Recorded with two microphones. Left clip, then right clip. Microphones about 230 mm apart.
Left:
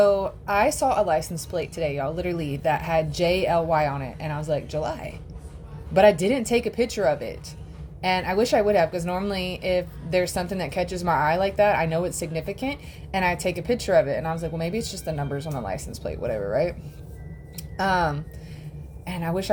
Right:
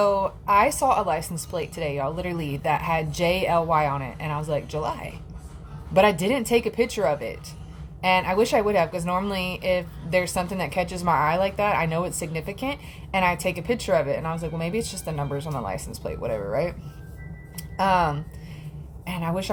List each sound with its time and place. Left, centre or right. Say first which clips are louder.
0.0 s speech: left 2 dB; centre
0.8 s a woman's voice: even; right
1.0 s a woman's voice: left 2 dB; centre
19.1 s a woman's voice: even; centre